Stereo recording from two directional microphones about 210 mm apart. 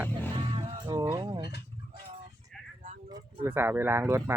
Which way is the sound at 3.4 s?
10° right (ahead or behind).